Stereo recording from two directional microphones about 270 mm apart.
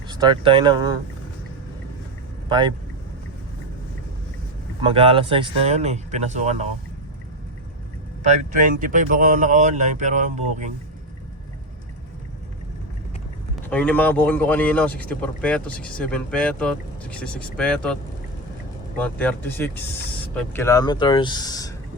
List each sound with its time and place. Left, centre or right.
0.1 s speech: centre
2.5 s speech: centre
4.8 s speech: centre
8.2 s speech: right
13.7 s speech: centre
18.9 s speech: centre